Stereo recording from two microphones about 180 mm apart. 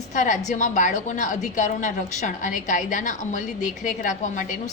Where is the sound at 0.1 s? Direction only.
45° left (ahead or behind).